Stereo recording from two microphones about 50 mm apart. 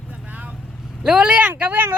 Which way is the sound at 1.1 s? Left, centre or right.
Centre.